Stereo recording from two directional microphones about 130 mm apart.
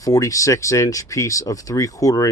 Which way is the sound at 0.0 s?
25° left (ahead or behind).